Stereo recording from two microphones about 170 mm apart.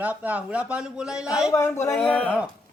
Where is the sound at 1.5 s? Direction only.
15° left (ahead or behind).